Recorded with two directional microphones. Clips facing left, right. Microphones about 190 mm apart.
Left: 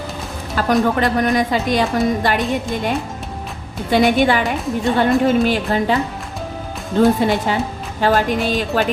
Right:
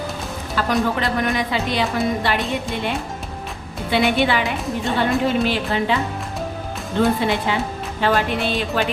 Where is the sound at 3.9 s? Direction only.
45° left (ahead or behind).